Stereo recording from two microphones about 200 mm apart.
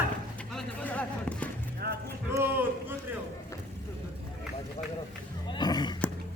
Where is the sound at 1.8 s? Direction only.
50° right (ahead or behind).